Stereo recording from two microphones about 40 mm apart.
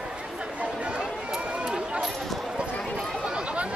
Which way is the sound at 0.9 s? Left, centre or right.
Centre.